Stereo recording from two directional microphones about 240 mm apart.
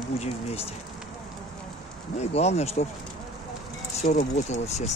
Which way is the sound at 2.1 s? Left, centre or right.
Left.